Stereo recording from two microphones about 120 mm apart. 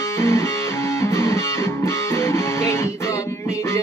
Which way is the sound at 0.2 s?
20° left (ahead or behind).